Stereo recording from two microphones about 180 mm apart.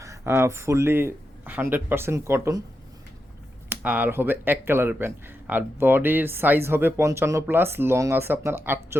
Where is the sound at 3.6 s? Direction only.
10° right (ahead or behind).